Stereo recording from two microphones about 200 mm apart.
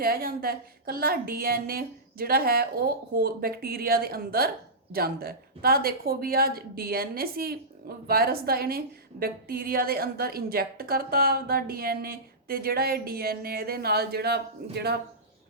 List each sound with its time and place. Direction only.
0.0 s a woman's voice: 50° right (ahead or behind)